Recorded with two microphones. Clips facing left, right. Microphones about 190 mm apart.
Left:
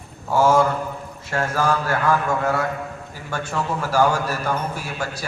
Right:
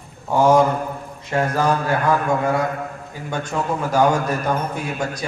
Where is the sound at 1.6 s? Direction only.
20° right (ahead or behind).